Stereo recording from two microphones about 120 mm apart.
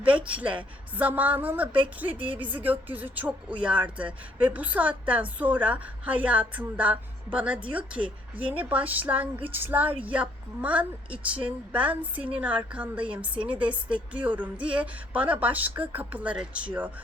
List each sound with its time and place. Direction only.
0.3 s a woman's voice: 10° right (ahead or behind)
13.0 s a woman's voice: 45° right (ahead or behind)
13.5 s a woman's voice: 10° right (ahead or behind)